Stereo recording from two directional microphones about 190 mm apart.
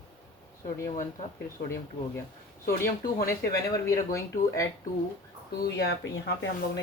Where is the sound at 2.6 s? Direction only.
50° left (ahead or behind).